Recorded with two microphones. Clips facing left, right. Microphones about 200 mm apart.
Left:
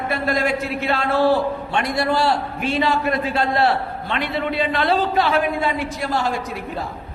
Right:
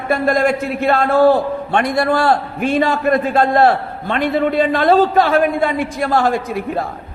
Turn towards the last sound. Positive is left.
turn(degrees=-55)  # may be behind; listen again after turning